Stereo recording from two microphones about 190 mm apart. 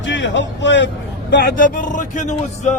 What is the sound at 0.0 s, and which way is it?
Speech, 70° left (ahead or behind).